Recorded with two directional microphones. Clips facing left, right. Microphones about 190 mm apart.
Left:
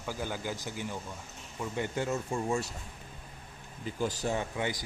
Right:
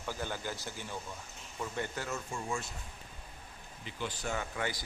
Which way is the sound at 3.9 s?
40° left (ahead or behind).